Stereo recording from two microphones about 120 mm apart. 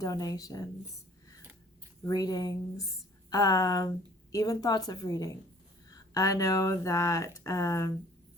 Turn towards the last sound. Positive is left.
turn(degrees=25)  # may be behind; listen again after turning